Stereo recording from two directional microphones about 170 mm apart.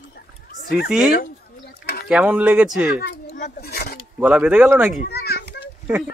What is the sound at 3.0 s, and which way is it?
Speech, 60° left (ahead or behind).